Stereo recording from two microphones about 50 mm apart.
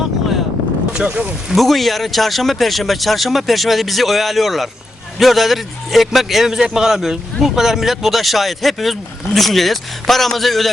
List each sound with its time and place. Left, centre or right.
0.9 s speech: centre
1.5 s a man's voice: centre